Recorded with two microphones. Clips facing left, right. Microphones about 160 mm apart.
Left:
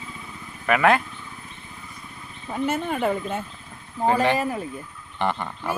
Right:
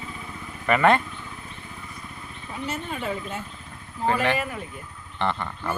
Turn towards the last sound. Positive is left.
turn(degrees=15)  # may be behind; listen again after turning